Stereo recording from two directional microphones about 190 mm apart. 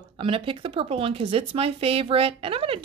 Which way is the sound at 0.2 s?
25° right (ahead or behind).